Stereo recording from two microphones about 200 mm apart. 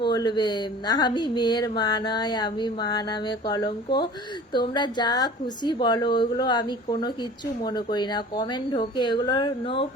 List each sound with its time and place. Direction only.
0.0 s a woman's voice: 20° left (ahead or behind)